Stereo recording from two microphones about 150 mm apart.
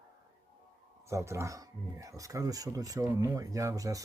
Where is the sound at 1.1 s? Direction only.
20° right (ahead or behind).